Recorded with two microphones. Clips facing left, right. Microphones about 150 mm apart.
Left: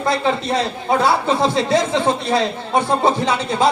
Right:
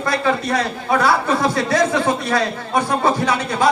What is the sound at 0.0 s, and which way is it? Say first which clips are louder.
A man's voice: left 1 dB; 25° left (ahead or behind).